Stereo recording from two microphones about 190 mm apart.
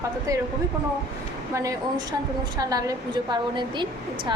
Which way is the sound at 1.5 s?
15° right (ahead or behind).